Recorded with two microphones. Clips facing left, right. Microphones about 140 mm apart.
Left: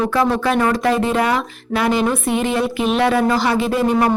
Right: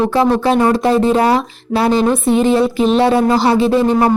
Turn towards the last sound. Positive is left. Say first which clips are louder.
# right 4 dB
turn(degrees=-30)  # may be behind; listen again after turning